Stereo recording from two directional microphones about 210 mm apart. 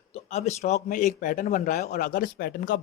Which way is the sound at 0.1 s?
30° left (ahead or behind).